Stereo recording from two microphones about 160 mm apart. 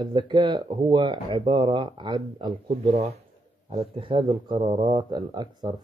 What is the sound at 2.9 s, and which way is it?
Speech, 40° right (ahead or behind).